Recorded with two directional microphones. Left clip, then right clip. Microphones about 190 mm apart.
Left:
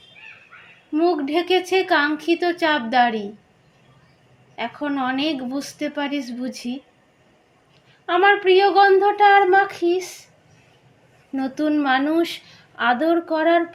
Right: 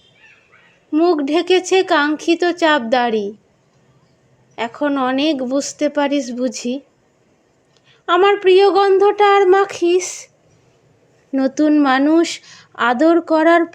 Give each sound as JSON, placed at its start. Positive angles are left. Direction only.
{"t": 0.9, "sound": "a woman's voice", "side_deg": -65}
{"t": 4.5, "sound": "a woman's voice", "side_deg": -65}
{"t": 8.0, "sound": "a woman's voice", "side_deg": -65}
{"t": 11.3, "sound": "a woman's voice", "side_deg": -65}